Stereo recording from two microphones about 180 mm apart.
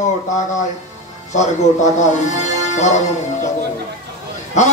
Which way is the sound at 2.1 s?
40° left (ahead or behind).